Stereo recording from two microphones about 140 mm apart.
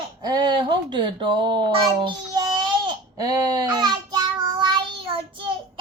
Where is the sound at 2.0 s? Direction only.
30° right (ahead or behind).